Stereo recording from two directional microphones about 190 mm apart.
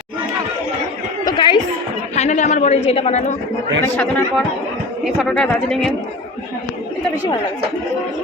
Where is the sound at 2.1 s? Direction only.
40° left (ahead or behind).